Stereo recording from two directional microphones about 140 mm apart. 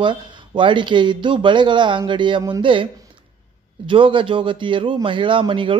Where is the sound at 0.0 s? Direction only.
35° right (ahead or behind).